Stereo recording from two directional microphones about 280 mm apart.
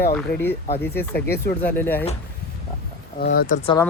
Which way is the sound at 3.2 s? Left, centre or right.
Left.